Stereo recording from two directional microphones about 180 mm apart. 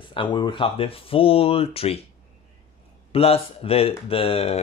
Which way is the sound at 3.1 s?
35° left (ahead or behind).